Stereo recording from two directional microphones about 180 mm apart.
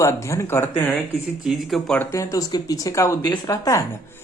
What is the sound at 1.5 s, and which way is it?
A man's voice, centre (ahead or behind).